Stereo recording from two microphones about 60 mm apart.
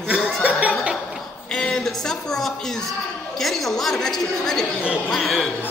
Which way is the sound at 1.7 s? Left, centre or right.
Centre.